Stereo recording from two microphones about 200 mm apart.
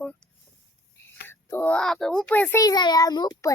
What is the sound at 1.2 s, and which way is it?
A child's voice, 10° left (ahead or behind).